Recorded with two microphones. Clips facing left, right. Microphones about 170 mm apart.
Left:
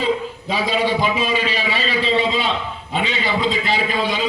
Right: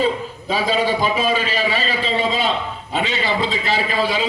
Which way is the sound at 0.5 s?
40° right (ahead or behind).